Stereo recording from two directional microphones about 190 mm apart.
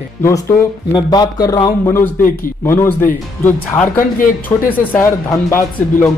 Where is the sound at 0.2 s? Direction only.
15° left (ahead or behind).